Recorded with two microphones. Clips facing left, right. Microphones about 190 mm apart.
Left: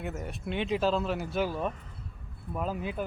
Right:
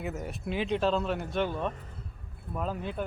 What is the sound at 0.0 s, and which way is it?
Speech, centre (ahead or behind).